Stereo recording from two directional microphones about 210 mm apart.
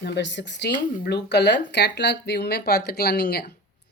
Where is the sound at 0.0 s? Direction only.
55° left (ahead or behind).